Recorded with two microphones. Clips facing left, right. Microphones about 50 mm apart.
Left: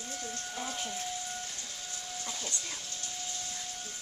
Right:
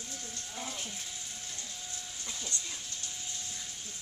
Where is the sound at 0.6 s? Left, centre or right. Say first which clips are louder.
Left 5 dB; left.